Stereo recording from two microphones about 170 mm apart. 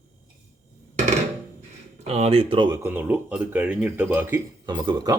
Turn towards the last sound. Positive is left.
turn(degrees=-25)  # may be behind; listen again after turning